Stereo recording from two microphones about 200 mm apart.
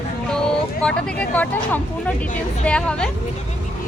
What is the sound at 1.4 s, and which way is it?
A woman's voice, 10° left (ahead or behind).